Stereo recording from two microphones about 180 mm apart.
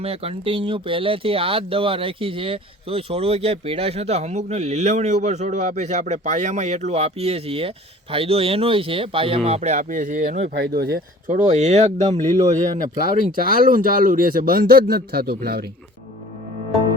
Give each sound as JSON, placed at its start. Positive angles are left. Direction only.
{"t": 0.0, "sound": "speech", "side_deg": -35}
{"t": 10.5, "sound": "speech", "side_deg": -60}
{"t": 11.3, "sound": "speech", "side_deg": -40}
{"t": 13.3, "sound": "speech", "side_deg": -50}